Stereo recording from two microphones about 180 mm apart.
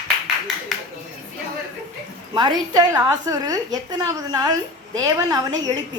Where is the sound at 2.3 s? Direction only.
25° right (ahead or behind).